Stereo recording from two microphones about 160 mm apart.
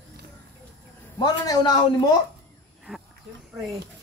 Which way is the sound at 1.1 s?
25° left (ahead or behind).